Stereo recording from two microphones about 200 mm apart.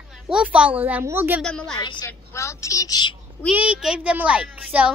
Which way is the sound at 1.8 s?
20° left (ahead or behind).